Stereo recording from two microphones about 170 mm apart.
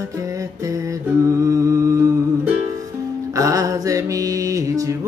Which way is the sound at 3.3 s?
20° right (ahead or behind).